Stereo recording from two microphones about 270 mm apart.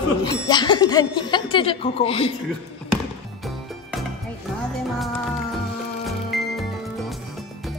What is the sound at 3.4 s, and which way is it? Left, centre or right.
Music, centre.